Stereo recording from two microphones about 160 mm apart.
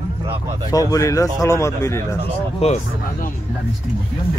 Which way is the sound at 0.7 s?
20° left (ahead or behind).